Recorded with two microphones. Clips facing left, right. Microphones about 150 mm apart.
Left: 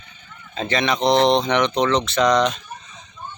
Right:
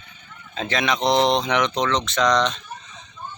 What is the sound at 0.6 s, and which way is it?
Speech, centre (ahead or behind).